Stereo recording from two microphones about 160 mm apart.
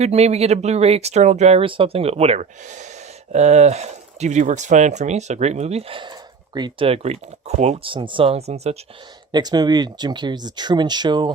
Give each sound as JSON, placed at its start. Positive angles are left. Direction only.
{"t": 0.0, "sound": "speech", "side_deg": -40}
{"t": 9.3, "sound": "speech", "side_deg": -25}